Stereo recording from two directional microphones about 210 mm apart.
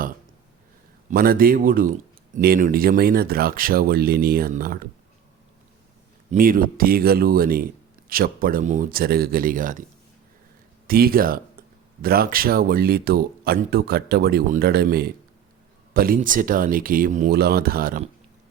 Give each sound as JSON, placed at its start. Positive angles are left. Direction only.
{"t": 1.1, "sound": "speech", "side_deg": -45}
{"t": 6.3, "sound": "speech", "side_deg": -40}
{"t": 10.8, "sound": "speech", "side_deg": -45}